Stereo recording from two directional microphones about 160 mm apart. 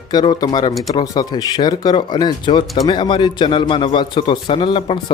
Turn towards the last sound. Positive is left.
turn(degrees=30)  # may be behind; listen again after turning